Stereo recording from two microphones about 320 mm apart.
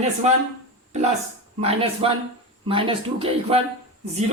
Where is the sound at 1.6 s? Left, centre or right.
Centre.